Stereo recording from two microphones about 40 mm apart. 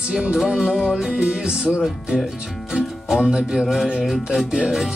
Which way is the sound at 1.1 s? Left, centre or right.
Right.